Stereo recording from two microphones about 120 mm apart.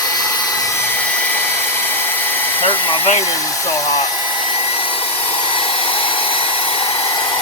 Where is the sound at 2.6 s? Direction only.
50° left (ahead or behind).